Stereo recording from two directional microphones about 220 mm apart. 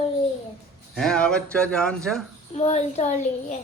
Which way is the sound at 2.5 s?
30° left (ahead or behind).